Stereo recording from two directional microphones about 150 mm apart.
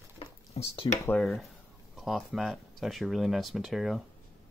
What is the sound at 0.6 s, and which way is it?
Speech, 40° left (ahead or behind).